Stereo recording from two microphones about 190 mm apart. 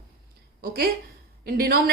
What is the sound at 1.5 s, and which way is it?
Speech, 50° right (ahead or behind).